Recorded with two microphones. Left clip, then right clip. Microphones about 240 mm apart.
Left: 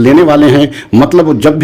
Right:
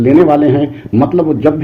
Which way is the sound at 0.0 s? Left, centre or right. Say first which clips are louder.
Left 3 dB; left.